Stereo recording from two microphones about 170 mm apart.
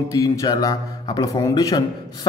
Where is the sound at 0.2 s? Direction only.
20° left (ahead or behind).